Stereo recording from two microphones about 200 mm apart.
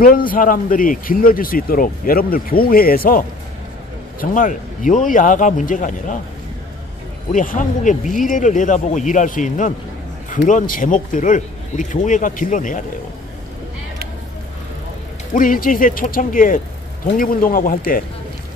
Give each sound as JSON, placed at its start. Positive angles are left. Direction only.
{"t": 0.0, "sound": "speech", "side_deg": 45}
{"t": 7.3, "sound": "speech", "side_deg": 40}
{"t": 15.3, "sound": "speech", "side_deg": 45}